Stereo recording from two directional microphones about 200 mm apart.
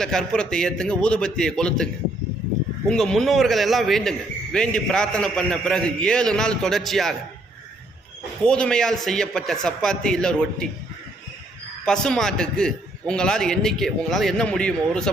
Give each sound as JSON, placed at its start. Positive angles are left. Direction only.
{"t": 0.0, "sound": "a man's voice", "side_deg": 5}
{"t": 2.9, "sound": "a man's voice", "side_deg": 0}
{"t": 8.4, "sound": "a man's voice", "side_deg": 5}
{"t": 11.9, "sound": "a man's voice", "side_deg": 5}